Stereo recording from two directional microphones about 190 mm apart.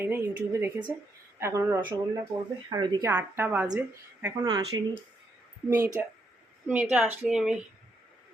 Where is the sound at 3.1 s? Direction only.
10° right (ahead or behind).